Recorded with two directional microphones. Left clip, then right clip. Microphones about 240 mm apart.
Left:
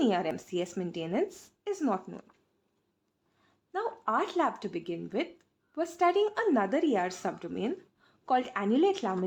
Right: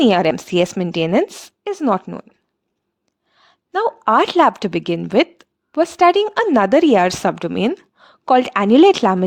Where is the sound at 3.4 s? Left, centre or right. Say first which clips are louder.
Right 15 dB; right.